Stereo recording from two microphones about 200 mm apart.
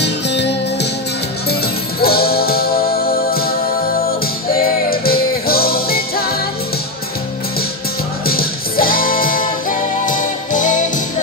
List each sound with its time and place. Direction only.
0.0 s music: 60° left (ahead or behind)
8.3 s music: 45° left (ahead or behind)